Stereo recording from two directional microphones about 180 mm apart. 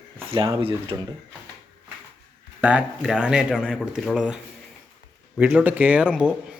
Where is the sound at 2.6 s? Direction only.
5° right (ahead or behind).